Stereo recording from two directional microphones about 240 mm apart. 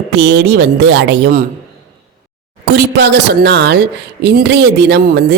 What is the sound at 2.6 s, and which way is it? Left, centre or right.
A man's voice, right.